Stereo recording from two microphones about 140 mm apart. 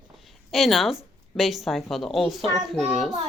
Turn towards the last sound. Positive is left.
turn(degrees=0)  # may be behind; listen again after turning